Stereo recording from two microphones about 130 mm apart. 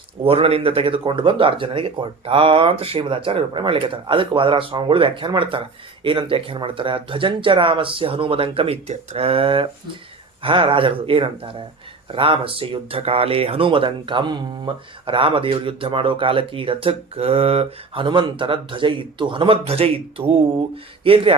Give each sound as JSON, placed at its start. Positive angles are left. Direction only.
{"t": 0.2, "sound": "speech", "side_deg": -45}